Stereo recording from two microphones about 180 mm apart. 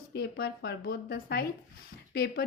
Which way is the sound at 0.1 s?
65° left (ahead or behind).